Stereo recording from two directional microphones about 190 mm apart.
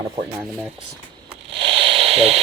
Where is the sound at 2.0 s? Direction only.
35° right (ahead or behind).